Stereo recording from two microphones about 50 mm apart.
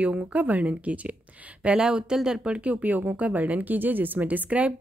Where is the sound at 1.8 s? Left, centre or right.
Centre.